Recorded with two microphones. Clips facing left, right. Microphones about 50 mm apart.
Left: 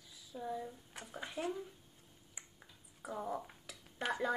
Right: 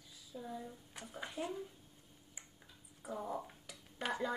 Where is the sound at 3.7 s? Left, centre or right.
Centre.